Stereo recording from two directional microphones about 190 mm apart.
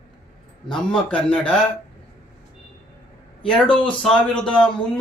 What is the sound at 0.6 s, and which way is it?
Speech, 5° left (ahead or behind).